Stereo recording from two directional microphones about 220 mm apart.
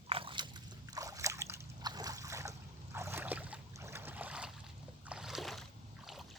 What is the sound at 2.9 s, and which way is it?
Boat, 10° right (ahead or behind).